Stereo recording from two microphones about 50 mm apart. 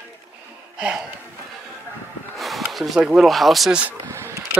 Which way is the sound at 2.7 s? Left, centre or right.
Centre.